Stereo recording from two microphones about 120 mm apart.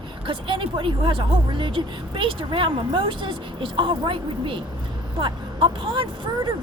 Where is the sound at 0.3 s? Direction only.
45° right (ahead or behind).